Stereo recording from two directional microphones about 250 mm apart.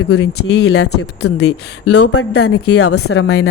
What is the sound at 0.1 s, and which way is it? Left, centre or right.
Speech, left.